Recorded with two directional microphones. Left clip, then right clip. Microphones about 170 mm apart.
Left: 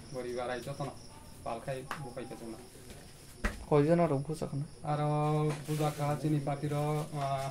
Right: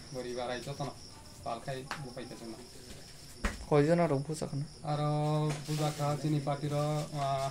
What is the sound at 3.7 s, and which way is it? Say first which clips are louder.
Speech: even; 5° left (ahead or behind).